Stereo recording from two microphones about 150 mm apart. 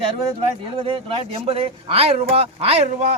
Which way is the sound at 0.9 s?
40° right (ahead or behind).